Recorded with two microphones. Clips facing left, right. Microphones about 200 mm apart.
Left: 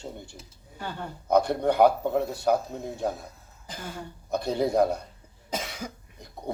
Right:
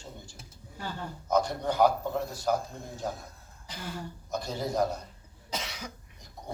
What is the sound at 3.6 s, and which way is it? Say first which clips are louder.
Speech: left 1 dB; 50° left (ahead or behind).